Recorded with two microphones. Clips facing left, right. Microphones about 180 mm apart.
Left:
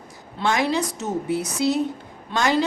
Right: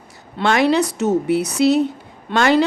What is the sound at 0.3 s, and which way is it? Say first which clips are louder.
A woman's voice: right 6 dB; 70° right (ahead or behind).